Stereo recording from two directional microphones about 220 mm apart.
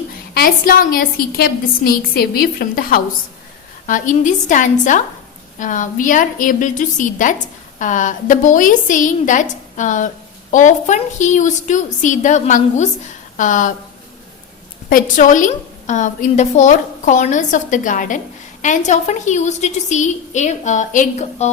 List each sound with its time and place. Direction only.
0.3 s a woman's voice: 40° left (ahead or behind)
14.8 s a woman's voice: 40° left (ahead or behind)